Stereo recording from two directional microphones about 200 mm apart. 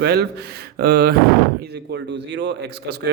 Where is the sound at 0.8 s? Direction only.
50° right (ahead or behind).